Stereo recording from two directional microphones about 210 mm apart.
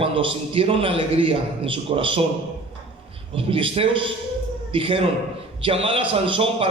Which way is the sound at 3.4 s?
25° right (ahead or behind).